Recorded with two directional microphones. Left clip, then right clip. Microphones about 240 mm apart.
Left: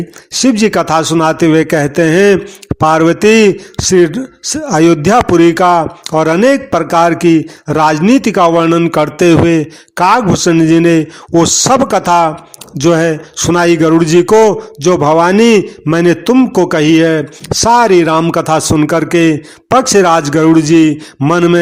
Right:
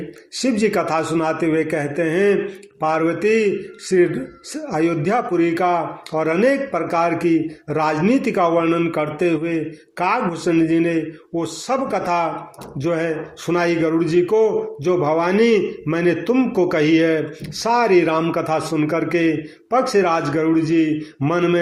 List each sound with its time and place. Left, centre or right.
0.3 s speech: left